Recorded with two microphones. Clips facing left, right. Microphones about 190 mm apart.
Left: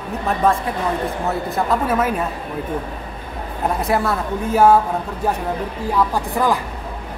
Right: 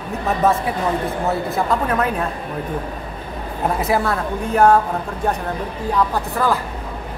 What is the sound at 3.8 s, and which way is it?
Speech, centre (ahead or behind).